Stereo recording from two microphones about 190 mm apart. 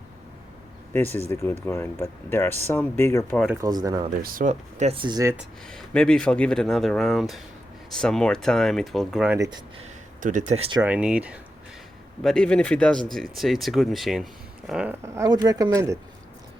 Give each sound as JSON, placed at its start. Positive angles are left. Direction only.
{"t": 0.9, "sound": "speech", "side_deg": 10}
{"t": 3.6, "sound": "speech", "side_deg": -20}
{"t": 4.2, "sound": "speech", "side_deg": -45}
{"t": 5.6, "sound": "speech", "side_deg": 5}
{"t": 10.2, "sound": "speech", "side_deg": -40}
{"t": 10.8, "sound": "speech", "side_deg": -5}